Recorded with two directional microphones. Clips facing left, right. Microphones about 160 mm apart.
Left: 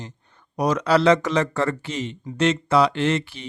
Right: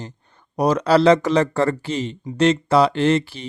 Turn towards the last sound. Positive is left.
turn(degrees=-35)  # may be behind; listen again after turning